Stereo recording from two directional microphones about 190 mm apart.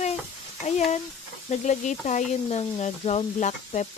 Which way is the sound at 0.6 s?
35° left (ahead or behind).